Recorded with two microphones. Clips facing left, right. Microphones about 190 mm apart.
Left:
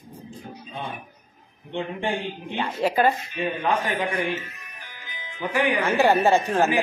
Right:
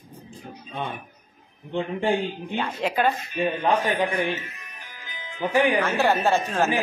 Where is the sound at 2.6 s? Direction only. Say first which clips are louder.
Left 3 dB; 10° left (ahead or behind).